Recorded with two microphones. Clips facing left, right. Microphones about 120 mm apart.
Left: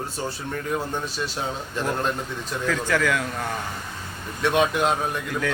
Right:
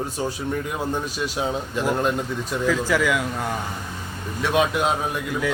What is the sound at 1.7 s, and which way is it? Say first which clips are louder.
A man's voice: right 2 dB; 10° right (ahead or behind).